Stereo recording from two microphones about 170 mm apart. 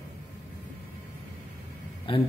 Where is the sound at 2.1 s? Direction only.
30° left (ahead or behind).